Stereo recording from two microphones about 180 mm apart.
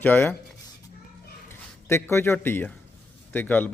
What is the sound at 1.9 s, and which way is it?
A man's voice, 15° left (ahead or behind).